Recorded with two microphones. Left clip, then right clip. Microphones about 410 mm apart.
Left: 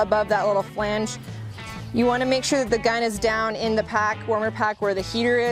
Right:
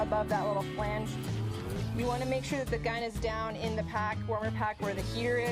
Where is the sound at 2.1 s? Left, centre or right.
Left.